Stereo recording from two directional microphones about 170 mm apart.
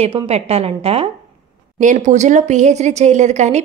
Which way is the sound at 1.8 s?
45° right (ahead or behind).